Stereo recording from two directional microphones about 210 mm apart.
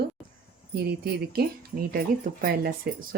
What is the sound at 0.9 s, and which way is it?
Speech, 45° right (ahead or behind).